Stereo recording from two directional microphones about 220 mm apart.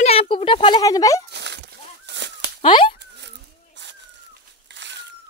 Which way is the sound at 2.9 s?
50° right (ahead or behind).